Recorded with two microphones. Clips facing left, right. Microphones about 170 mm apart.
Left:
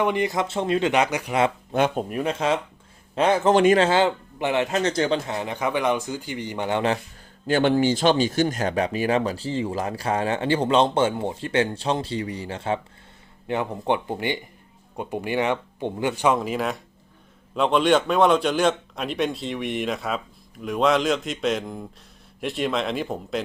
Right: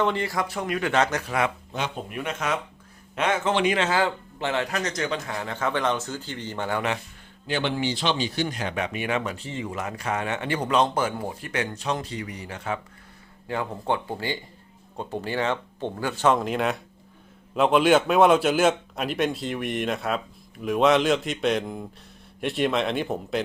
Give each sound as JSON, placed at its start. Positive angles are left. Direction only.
{"t": 0.0, "sound": "speech", "side_deg": 15}
{"t": 1.7, "sound": "speech", "side_deg": 50}
{"t": 3.8, "sound": "a man's voice", "side_deg": 25}
{"t": 7.4, "sound": "a man's voice", "side_deg": 45}